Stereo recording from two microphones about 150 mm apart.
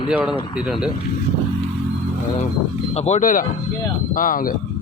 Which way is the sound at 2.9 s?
45° left (ahead or behind).